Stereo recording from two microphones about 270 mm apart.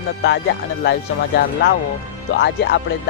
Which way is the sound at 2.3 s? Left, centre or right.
Left.